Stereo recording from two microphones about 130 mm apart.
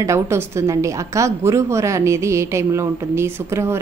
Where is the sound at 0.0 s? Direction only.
20° right (ahead or behind).